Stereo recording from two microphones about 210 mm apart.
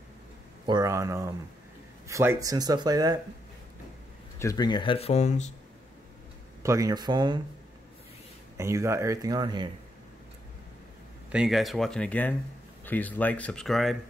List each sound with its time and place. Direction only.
0.7 s speech: 15° right (ahead or behind)
4.4 s speech: 15° left (ahead or behind); by 5.5 s 35° left (ahead or behind)
6.6 s speech: 15° right (ahead or behind)
8.5 s speech: 15° right (ahead or behind)
11.3 s speech: centre (ahead or behind)